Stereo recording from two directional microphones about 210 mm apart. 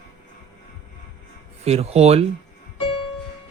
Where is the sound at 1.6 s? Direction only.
30° right (ahead or behind).